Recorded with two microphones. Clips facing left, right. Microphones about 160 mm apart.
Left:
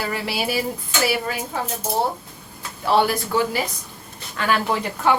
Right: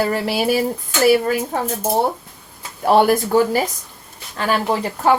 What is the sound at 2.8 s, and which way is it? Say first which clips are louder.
Speech: right 5 dB; 50° right (ahead or behind).